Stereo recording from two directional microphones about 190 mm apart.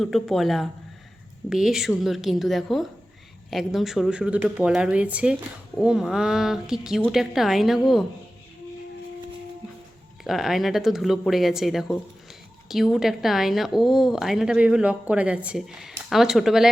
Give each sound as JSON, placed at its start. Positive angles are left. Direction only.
{"t": 0.0, "sound": "speech", "side_deg": 0}
{"t": 10.2, "sound": "speech", "side_deg": 0}